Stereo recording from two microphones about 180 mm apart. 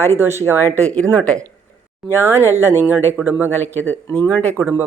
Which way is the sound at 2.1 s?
15° right (ahead or behind).